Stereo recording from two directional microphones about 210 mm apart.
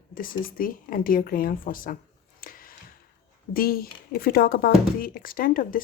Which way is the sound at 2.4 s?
40° left (ahead or behind).